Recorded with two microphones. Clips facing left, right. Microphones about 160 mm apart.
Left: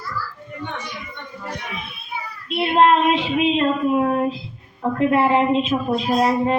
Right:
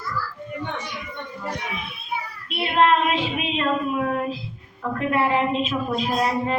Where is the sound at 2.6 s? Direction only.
30° left (ahead or behind).